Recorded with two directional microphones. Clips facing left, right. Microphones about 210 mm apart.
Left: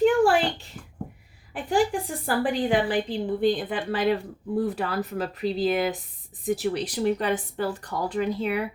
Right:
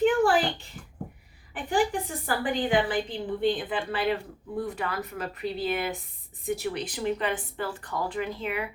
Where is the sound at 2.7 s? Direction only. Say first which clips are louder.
Left 2 dB; 35° left (ahead or behind).